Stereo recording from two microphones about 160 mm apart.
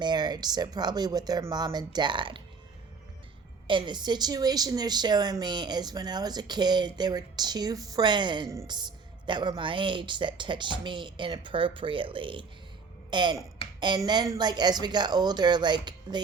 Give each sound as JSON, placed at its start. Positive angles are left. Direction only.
{"t": 0.0, "sound": "speech", "side_deg": -25}
{"t": 3.7, "sound": "speech", "side_deg": -30}